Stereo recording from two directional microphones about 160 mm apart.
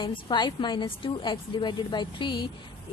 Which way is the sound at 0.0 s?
30° left (ahead or behind).